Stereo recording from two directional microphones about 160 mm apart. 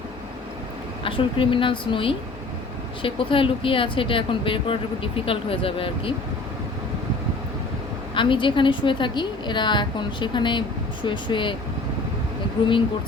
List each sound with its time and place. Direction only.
1.0 s speech: 35° left (ahead or behind)
8.1 s a woman's voice: 30° left (ahead or behind)